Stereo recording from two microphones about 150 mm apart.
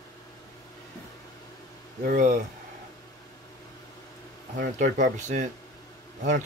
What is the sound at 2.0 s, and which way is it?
Speech, 60° right (ahead or behind).